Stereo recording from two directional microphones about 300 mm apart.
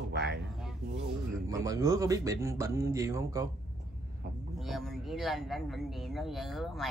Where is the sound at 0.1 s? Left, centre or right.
Right.